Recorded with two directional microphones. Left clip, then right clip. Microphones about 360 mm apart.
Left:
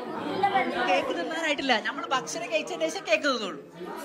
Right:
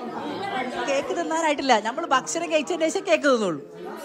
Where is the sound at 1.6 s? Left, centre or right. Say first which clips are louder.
Right 5 dB; right.